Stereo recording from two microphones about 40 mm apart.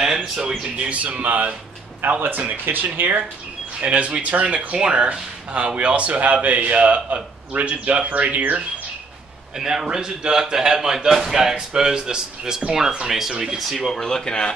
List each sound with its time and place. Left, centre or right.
0.0 s a sound: centre
0.5 s a man's voice: right
3.8 s a man's voice: right
9.6 s a man's voice: centre
13.6 s speech: centre
13.9 s speech: centre